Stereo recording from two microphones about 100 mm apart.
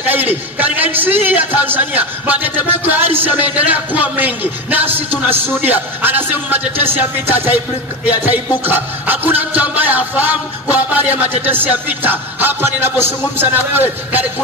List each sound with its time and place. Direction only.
0.0 s music: 20° right (ahead or behind)
2.8 s speech: 20° right (ahead or behind)
8.6 s music: 20° right (ahead or behind)
13.4 s speech: 20° right (ahead or behind)